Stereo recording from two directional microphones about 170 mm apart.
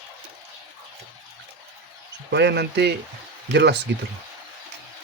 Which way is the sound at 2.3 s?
80° right.